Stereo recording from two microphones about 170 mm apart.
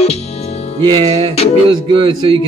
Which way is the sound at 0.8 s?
30° right (ahead or behind).